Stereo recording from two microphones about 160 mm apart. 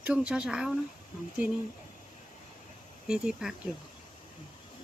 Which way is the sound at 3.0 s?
5° right (ahead or behind).